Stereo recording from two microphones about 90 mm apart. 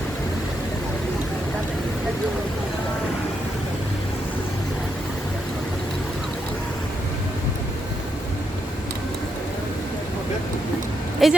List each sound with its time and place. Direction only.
11.2 s speech: centre (ahead or behind)